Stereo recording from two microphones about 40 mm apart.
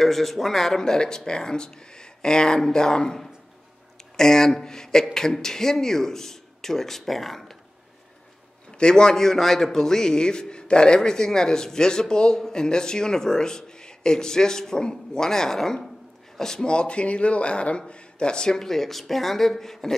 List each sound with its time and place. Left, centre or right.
0.0 s a man's voice: centre
4.2 s a man's voice: centre
8.7 s a man's voice: left